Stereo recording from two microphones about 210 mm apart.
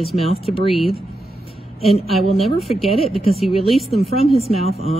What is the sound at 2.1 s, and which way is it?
Speech, centre (ahead or behind).